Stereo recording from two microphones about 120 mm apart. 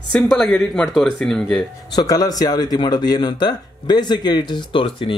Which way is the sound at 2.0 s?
35° left (ahead or behind).